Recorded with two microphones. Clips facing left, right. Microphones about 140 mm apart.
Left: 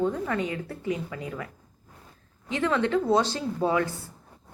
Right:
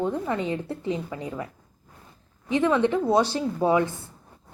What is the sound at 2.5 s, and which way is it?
Speech, 15° right (ahead or behind).